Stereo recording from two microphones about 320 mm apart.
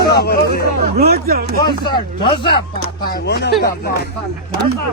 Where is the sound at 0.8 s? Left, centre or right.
Right.